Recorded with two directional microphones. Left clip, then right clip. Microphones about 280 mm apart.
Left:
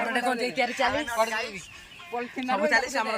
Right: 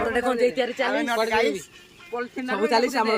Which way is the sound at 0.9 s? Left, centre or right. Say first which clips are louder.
Right 3 dB; right.